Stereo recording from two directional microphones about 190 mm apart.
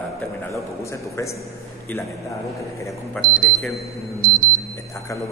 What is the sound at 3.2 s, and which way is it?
Speech, centre (ahead or behind).